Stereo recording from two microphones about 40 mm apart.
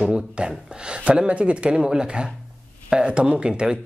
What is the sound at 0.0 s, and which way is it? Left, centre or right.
Speech, right.